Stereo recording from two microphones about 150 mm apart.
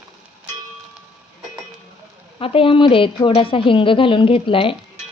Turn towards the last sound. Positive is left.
turn(degrees=35)  # may be behind; listen again after turning